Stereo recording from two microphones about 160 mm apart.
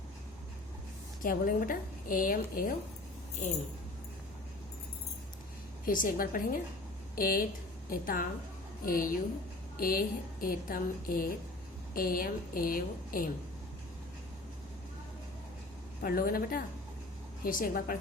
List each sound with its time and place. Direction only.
1.2 s a woman's voice: 60° left (ahead or behind)
5.8 s a woman's voice: 60° left (ahead or behind)
16.0 s a woman's voice: 65° left (ahead or behind)